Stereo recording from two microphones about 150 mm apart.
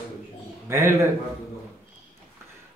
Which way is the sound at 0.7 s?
20° right (ahead or behind).